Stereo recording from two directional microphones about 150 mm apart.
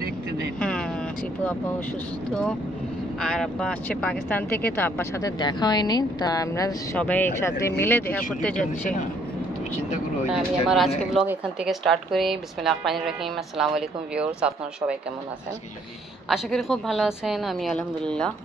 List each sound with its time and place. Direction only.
0.6 s vehicle: 5° left (ahead or behind)
3.2 s speech: 5° left (ahead or behind)
5.4 s speech: 30° left (ahead or behind)
7.0 s speech: 10° left (ahead or behind)
10.3 s a woman's voice: centre (ahead or behind)
16.3 s a woman's voice: centre (ahead or behind)